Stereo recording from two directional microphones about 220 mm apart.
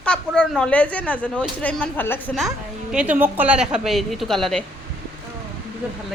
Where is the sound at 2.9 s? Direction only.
5° right (ahead or behind).